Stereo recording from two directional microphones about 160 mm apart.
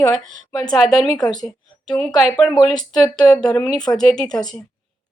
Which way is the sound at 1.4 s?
5° left (ahead or behind).